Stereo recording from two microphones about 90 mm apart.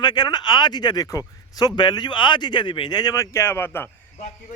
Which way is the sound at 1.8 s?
55° left (ahead or behind).